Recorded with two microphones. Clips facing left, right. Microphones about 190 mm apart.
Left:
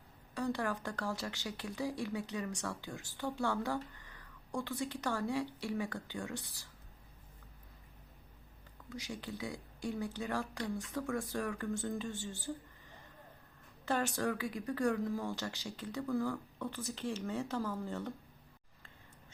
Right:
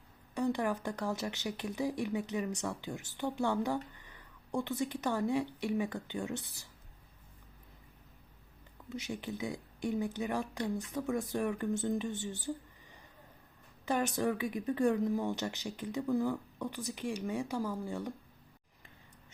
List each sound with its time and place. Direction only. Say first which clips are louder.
0.3 s speech: right 4 dB; 20° right (ahead or behind)
8.9 s speech: right 4 dB; 20° right (ahead or behind)
13.8 s speech: right 3 dB; 15° right (ahead or behind)